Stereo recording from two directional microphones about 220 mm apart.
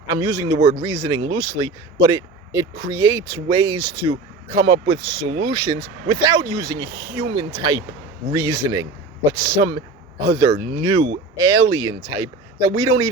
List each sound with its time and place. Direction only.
0.1 s speech: 15° right (ahead or behind)